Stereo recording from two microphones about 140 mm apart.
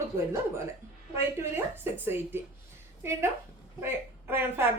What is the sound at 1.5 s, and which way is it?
Speech, 15° right (ahead or behind).